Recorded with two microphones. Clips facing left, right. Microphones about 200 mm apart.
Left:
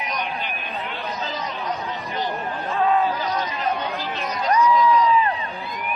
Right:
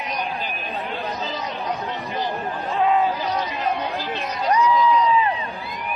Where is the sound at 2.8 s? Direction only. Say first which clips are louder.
Right 1 dB; 15° right (ahead or behind).